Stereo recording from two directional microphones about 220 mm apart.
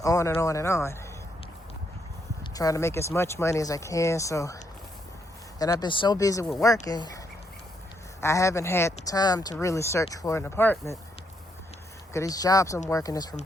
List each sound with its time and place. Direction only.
0.0 s speech: 15° left (ahead or behind)
2.4 s speech: 15° left (ahead or behind)
5.5 s speech: 15° left (ahead or behind)
8.2 s speech: 15° left (ahead or behind)
12.1 s speech: 15° left (ahead or behind)